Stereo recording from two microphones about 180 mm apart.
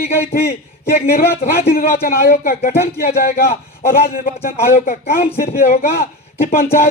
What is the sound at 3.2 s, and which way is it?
A man's voice, 55° left (ahead or behind).